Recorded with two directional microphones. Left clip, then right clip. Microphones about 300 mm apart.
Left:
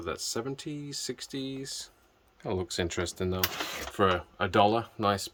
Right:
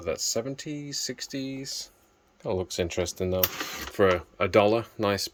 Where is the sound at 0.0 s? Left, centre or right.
Centre.